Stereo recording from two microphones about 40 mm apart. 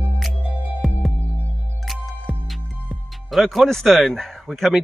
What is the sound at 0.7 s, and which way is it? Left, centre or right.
Music, centre.